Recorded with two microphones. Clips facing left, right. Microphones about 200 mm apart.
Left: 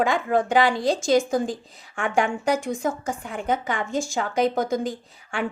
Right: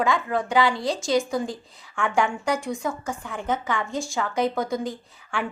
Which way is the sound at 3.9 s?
45° left (ahead or behind).